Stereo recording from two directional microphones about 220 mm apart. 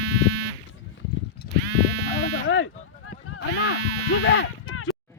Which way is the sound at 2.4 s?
55° left (ahead or behind).